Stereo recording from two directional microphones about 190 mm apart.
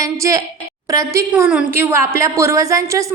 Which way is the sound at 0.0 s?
15° right (ahead or behind).